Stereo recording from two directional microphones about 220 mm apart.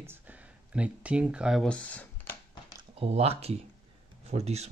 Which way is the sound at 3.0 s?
25° right (ahead or behind).